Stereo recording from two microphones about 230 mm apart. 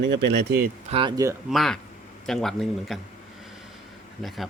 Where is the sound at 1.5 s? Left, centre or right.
Centre.